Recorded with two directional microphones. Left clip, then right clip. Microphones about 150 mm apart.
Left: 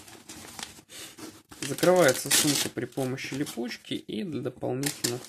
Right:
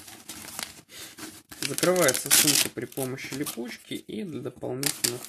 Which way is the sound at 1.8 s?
15° left (ahead or behind).